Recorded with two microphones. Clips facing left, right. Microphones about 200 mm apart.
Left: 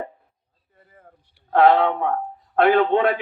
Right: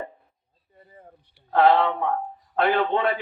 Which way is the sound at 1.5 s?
55° left (ahead or behind).